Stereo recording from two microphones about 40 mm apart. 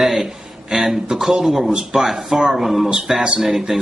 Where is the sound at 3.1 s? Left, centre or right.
Centre.